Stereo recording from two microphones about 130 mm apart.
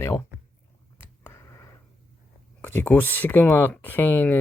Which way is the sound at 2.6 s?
15° left (ahead or behind).